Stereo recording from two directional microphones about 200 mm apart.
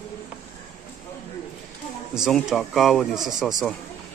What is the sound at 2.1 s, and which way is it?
Speech, centre (ahead or behind).